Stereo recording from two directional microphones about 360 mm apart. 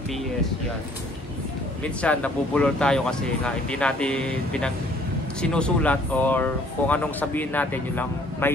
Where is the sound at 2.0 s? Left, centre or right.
Centre.